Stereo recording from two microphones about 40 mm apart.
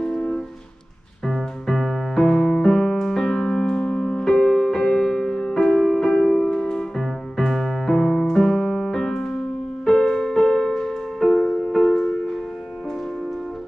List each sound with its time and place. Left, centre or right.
0.0 s music: centre
1.2 s music: centre
2.3 s music: centre
6.5 s music: centre
7.0 s music: centre